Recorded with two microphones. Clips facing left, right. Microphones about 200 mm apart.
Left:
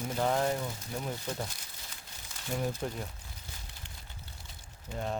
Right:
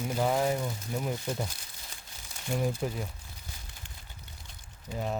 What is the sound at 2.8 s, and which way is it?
Speech, 5° right (ahead or behind).